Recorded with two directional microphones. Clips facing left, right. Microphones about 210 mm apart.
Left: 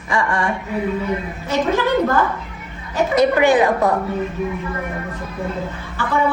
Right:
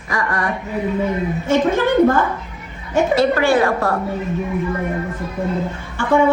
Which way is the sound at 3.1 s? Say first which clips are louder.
Left 2 dB; 20° left (ahead or behind).